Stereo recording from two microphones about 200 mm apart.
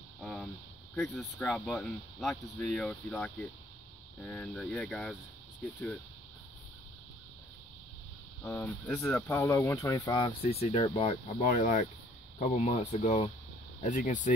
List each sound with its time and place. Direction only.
0.2 s a sound: 5° left (ahead or behind)
0.9 s speech: 5° left (ahead or behind)
8.5 s speech: 10° left (ahead or behind)
10.4 s speech: 30° left (ahead or behind)